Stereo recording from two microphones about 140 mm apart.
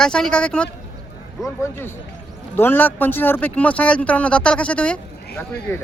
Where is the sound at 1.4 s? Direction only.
20° left (ahead or behind).